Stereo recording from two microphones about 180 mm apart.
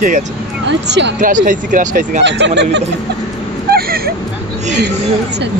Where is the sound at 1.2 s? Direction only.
45° right (ahead or behind).